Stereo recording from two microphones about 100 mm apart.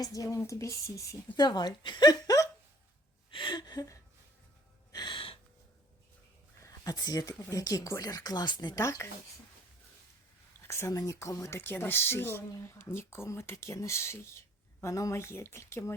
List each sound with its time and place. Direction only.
0.0 s speech: 35° left (ahead or behind)
1.4 s a woman's voice: 45° left (ahead or behind)
3.3 s a sound: 50° left (ahead or behind)
4.9 s music: 45° left (ahead or behind)
6.6 s speech: 35° left (ahead or behind)
8.8 s speech: 30° left (ahead or behind)
10.7 s speech: 30° left (ahead or behind)